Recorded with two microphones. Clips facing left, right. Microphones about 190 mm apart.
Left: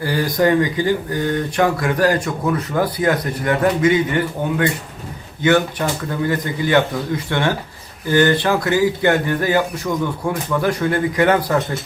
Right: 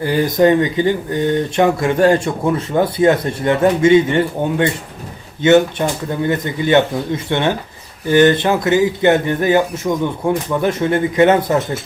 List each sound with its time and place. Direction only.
0.0 s speech: 20° right (ahead or behind)